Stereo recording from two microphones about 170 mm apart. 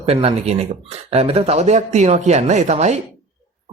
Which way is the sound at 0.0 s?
35° right (ahead or behind).